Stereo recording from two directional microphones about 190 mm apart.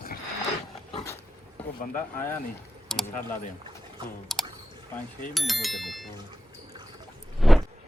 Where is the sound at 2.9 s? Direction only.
Centre (ahead or behind).